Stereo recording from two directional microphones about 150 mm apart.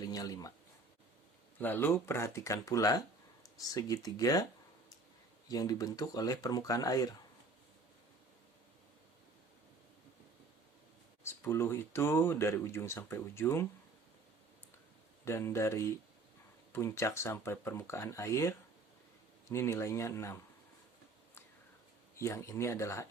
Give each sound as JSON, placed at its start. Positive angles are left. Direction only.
{"t": 0.0, "sound": "speech", "side_deg": 25}
{"t": 1.5, "sound": "speech", "side_deg": 15}
{"t": 5.5, "sound": "speech", "side_deg": 25}
{"t": 11.2, "sound": "speech", "side_deg": 20}
{"t": 15.2, "sound": "speech", "side_deg": 15}
{"t": 22.2, "sound": "speech", "side_deg": 20}